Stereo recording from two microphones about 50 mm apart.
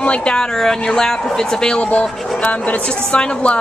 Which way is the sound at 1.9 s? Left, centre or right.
Left.